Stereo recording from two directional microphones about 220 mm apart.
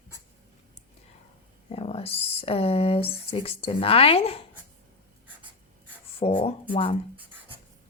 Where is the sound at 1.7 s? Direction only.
25° left (ahead or behind).